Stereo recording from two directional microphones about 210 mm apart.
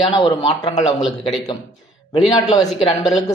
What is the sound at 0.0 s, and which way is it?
Speech, 20° left (ahead or behind).